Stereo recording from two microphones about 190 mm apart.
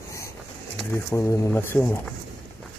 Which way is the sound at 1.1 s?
15° left (ahead or behind).